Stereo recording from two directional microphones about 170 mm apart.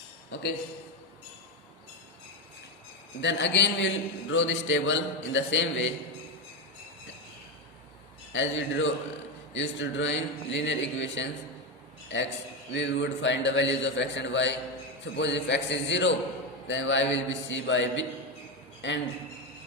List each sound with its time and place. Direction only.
3.2 s a man's voice: 90° left
8.3 s a man's voice: 90° left
12.7 s a man's voice: 90° left